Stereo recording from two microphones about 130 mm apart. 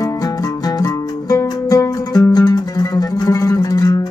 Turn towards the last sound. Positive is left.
turn(degrees=30)  # may be behind; listen again after turning